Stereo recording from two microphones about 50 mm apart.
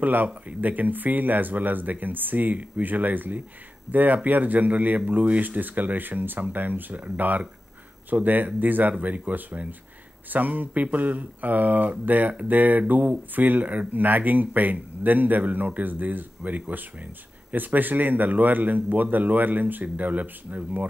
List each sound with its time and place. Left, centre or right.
0.0 s speech: right